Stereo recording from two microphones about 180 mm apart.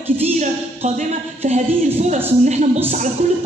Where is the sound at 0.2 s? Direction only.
40° right (ahead or behind).